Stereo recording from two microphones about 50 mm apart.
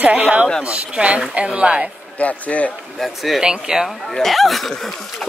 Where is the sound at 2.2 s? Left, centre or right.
Left.